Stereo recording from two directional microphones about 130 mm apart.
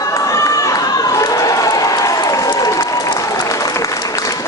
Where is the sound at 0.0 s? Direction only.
25° left (ahead or behind).